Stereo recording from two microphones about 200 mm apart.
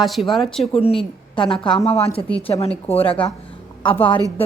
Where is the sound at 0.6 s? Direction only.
30° left (ahead or behind).